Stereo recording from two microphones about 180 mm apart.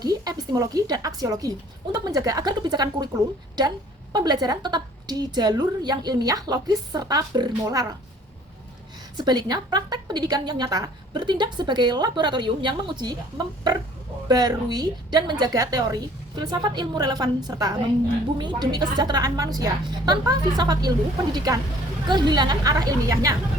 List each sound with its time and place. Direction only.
0.0 s a woman's voice: 20° right (ahead or behind)
9.1 s a woman's voice: 25° right (ahead or behind)